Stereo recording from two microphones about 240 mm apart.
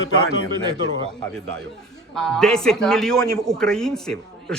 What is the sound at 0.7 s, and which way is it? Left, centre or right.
Speech, right.